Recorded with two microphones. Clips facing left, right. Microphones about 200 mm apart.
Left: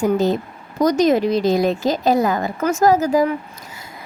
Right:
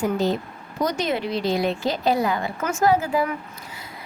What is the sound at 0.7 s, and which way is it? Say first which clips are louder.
A woman's voice: left 9 dB; 40° left (ahead or behind).